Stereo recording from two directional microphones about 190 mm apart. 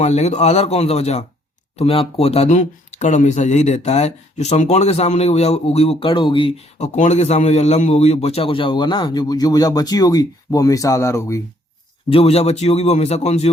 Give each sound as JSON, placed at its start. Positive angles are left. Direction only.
{"t": 0.0, "sound": "speech", "side_deg": 35}
{"t": 12.0, "sound": "speech", "side_deg": 30}